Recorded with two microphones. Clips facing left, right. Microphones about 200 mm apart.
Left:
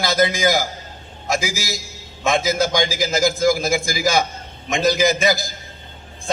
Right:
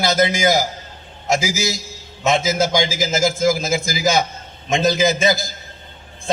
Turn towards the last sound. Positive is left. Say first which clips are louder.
# right 1 dB
turn(degrees=-25)  # may be behind; listen again after turning